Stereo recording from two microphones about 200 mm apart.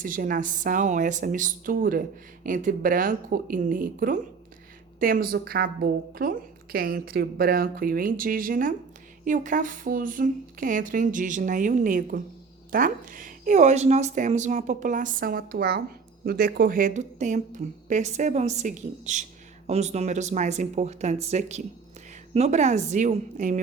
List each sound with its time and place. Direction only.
0.0 s a woman's voice: 45° right (ahead or behind)